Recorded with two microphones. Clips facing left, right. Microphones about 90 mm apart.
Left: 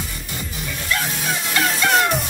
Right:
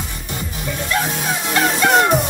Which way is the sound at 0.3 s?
5° right (ahead or behind).